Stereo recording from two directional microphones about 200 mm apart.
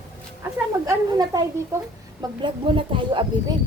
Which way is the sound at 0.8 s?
15° right (ahead or behind).